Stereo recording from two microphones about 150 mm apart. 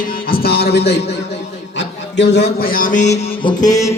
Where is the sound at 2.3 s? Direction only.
90° left; by 3.3 s 50° left (ahead or behind).